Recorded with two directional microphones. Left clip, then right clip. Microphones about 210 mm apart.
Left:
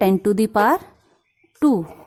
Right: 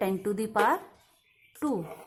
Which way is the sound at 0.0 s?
45° left (ahead or behind).